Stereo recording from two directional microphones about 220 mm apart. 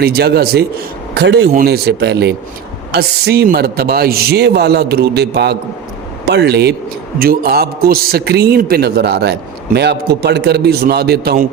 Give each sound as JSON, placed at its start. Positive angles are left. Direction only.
{"t": 0.0, "sound": "a man's voice", "side_deg": -45}